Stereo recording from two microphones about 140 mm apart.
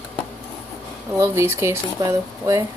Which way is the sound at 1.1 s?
20° right (ahead or behind).